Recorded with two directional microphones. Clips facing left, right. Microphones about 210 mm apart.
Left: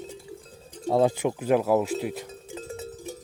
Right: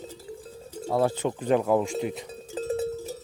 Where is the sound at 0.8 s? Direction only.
20° left (ahead or behind).